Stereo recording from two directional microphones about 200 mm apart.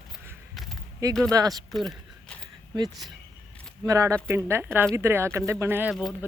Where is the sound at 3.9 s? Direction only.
15° right (ahead or behind).